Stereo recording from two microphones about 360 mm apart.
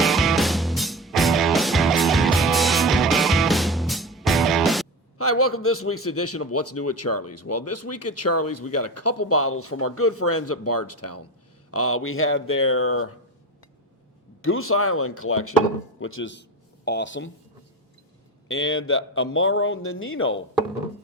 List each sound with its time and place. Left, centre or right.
0.0 s music: centre
5.1 s a man's voice: left
14.4 s a man's voice: left
18.4 s a man's voice: left